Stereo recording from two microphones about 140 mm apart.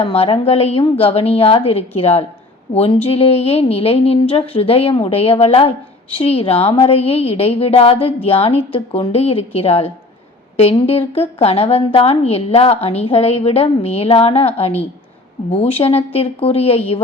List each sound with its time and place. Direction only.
0.0 s speech: 45° left (ahead or behind)